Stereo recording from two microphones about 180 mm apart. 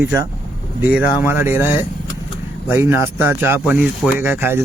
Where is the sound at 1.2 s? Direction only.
15° right (ahead or behind).